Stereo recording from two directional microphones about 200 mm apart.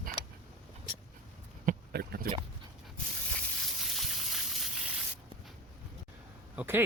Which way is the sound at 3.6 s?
Centre (ahead or behind).